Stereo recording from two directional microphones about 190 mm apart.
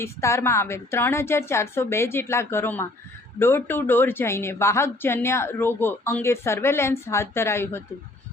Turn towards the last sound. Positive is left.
turn(degrees=15)  # may be behind; listen again after turning